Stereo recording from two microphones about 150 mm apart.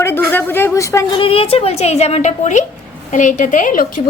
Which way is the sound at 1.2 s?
40° left (ahead or behind).